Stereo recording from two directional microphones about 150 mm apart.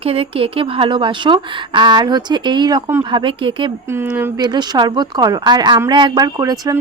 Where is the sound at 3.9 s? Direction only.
10° right (ahead or behind).